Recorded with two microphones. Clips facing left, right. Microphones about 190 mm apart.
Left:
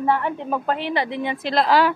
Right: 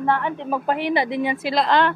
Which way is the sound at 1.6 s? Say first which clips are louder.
Left 2 dB; 5° left (ahead or behind).